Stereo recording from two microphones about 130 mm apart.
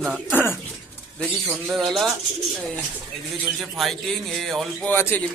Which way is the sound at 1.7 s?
Centre (ahead or behind).